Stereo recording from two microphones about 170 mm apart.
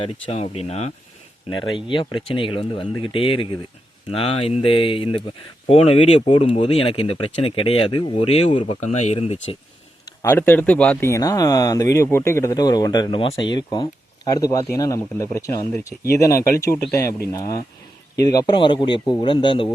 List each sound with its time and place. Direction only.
0.0 s speech: 35° left (ahead or behind)
1.5 s speech: 30° left (ahead or behind)
10.2 s speech: 15° left (ahead or behind)
11.1 s speech: 20° left (ahead or behind)